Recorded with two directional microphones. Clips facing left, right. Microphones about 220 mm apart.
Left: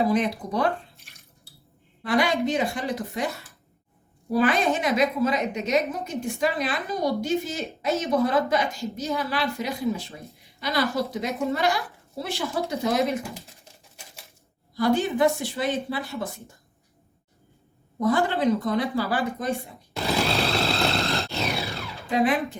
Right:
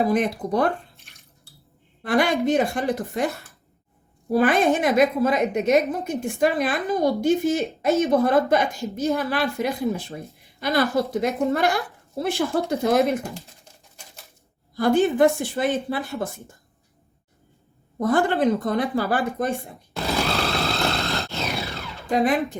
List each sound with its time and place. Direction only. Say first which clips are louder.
0.1 s a woman's voice: right 2 dB; 50° right (ahead or behind)
2.0 s a woman's voice: right 2 dB; 55° right (ahead or behind)
4.3 s a woman's voice: right 3 dB; 50° right (ahead or behind)
14.8 s a woman's voice: right 4 dB; 50° right (ahead or behind)
18.0 s a woman's voice: right 2 dB; 50° right (ahead or behind)
19.6 s grunt: even; centre (ahead or behind)
22.1 s a woman's voice: right 2 dB; 45° right (ahead or behind)